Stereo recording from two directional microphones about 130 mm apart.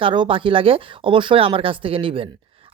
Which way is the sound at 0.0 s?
40° right (ahead or behind).